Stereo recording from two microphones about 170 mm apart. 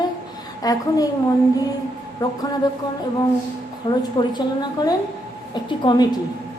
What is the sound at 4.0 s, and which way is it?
A woman's voice, 25° left (ahead or behind).